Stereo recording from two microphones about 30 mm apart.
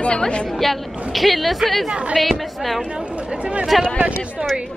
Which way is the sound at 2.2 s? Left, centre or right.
Centre.